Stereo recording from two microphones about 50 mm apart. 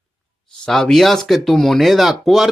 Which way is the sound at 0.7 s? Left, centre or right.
Centre.